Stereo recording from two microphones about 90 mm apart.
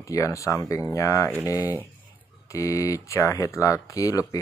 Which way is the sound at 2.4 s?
35° left (ahead or behind).